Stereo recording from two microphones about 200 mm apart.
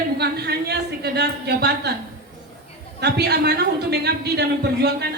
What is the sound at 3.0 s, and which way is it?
A man's voice, 55° right (ahead or behind).